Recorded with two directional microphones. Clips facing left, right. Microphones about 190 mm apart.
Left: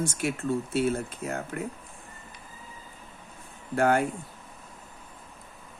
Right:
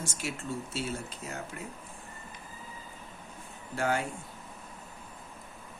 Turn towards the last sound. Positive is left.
turn(degrees=55)  # may be behind; listen again after turning